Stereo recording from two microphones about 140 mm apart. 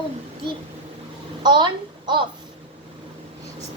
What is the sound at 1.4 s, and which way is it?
Speech, 35° right (ahead or behind).